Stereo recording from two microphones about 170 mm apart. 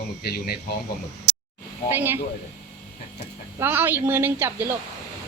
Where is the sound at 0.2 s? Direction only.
65° left (ahead or behind).